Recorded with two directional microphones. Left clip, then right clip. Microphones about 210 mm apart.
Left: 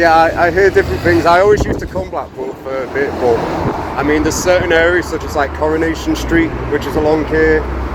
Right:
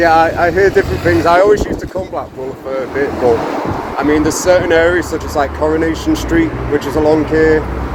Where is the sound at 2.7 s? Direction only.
10° right (ahead or behind).